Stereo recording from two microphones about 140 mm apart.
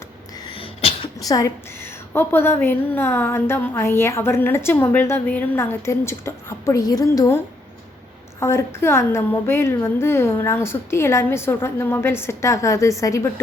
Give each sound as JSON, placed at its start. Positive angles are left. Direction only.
{"t": 0.5, "sound": "sneeze", "side_deg": 45}
{"t": 1.2, "sound": "a woman's voice", "side_deg": 25}